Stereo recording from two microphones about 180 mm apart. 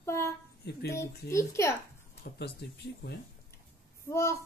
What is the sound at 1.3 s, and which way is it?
Female singing, 15° left (ahead or behind).